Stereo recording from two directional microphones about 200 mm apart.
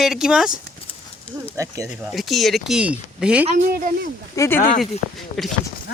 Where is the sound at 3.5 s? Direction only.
40° right (ahead or behind).